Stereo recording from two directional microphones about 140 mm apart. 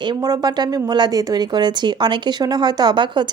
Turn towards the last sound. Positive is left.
turn(degrees=-35)  # may be behind; listen again after turning